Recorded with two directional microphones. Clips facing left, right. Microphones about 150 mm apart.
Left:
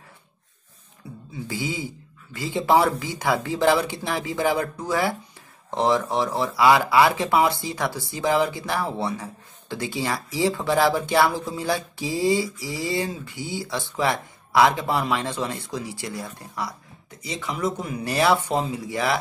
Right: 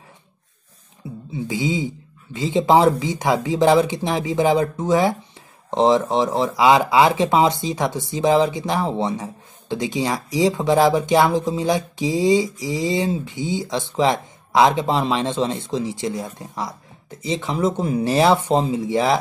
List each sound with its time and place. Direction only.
1.3 s speech: 20° right (ahead or behind)